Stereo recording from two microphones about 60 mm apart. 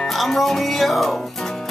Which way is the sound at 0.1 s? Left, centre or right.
Centre.